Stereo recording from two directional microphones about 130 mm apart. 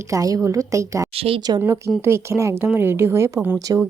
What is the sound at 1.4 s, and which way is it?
Speech, 30° right (ahead or behind).